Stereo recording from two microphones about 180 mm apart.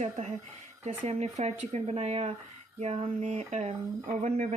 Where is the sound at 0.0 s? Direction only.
40° right (ahead or behind).